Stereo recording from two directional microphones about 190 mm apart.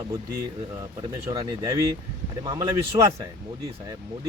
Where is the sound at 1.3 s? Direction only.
20° right (ahead or behind).